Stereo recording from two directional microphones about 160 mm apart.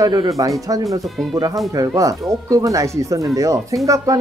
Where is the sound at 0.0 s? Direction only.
20° right (ahead or behind).